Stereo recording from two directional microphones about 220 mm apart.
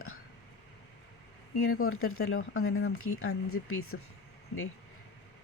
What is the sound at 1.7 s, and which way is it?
Speech, 75° left (ahead or behind).